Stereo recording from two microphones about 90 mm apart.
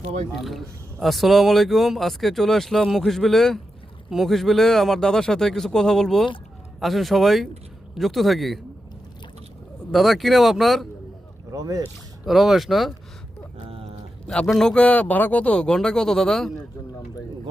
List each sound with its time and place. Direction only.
0.3 s a man's voice: centre (ahead or behind)
9.9 s a man's voice: centre (ahead or behind)
11.5 s speech: 40° right (ahead or behind)
12.2 s a man's voice: centre (ahead or behind)
13.7 s a sound: 90° right
14.3 s a man's voice: 5° left (ahead or behind)